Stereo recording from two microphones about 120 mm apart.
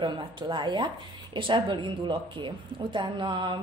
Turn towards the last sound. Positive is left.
turn(degrees=-40)  # may be behind; listen again after turning